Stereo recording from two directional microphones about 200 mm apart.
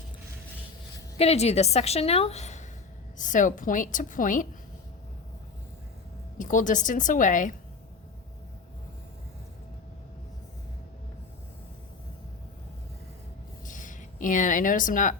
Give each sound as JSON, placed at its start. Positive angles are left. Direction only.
{"t": 1.2, "sound": "a woman's voice", "side_deg": 30}
{"t": 6.4, "sound": "a woman's voice", "side_deg": 40}
{"t": 13.7, "sound": "a sound", "side_deg": 40}